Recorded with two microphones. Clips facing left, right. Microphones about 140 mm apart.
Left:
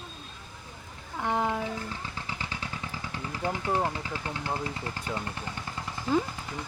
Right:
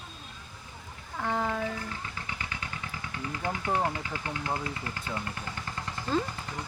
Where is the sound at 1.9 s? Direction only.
30° left (ahead or behind).